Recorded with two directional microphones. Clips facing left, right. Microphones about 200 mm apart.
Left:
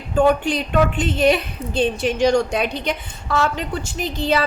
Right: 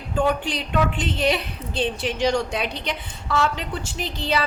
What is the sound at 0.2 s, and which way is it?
A woman's voice, 50° left (ahead or behind).